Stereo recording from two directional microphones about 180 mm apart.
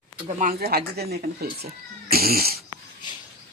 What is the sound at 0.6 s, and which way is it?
Speech, 60° right (ahead or behind).